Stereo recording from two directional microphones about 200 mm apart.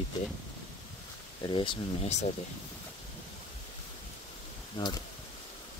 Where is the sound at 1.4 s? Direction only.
25° left (ahead or behind).